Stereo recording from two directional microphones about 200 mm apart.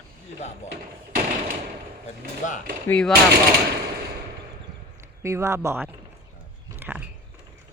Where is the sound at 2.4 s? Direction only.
40° left (ahead or behind).